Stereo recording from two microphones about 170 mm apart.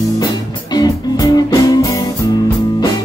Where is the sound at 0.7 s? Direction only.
20° left (ahead or behind).